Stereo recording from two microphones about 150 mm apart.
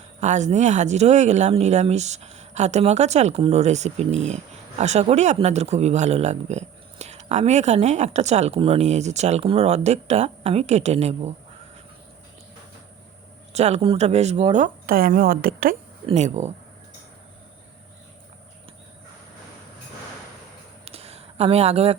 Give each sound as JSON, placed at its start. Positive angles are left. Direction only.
{"t": 0.2, "sound": "speech", "side_deg": -50}
{"t": 13.5, "sound": "speech", "side_deg": -45}
{"t": 16.0, "sound": "speech", "side_deg": -50}
{"t": 20.8, "sound": "a sound", "side_deg": -45}